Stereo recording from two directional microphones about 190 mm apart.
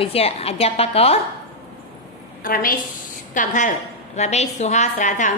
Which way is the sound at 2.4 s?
50° left (ahead or behind).